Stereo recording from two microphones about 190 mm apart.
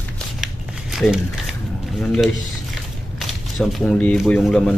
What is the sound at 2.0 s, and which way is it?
Speech, centre (ahead or behind).